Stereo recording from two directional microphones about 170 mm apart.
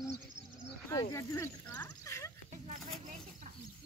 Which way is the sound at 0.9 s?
15° left (ahead or behind).